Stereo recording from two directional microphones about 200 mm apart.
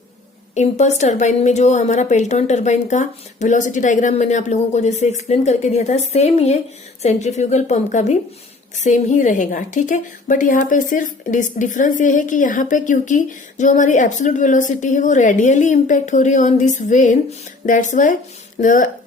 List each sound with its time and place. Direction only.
0.5 s a woman's voice: 35° left (ahead or behind)